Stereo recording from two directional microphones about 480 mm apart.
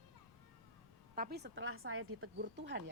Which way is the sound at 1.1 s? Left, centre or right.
Centre.